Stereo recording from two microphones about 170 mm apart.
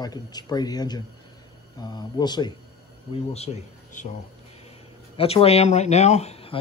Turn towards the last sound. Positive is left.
turn(degrees=35)  # may be behind; listen again after turning